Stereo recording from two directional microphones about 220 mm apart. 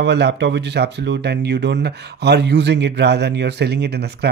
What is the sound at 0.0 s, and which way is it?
Speech, 50° right (ahead or behind).